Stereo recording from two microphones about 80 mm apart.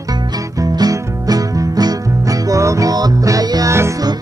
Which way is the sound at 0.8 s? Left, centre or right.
Right.